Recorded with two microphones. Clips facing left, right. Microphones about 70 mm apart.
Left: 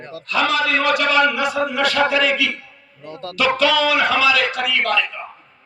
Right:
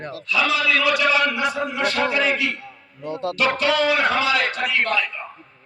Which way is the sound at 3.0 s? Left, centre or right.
Right.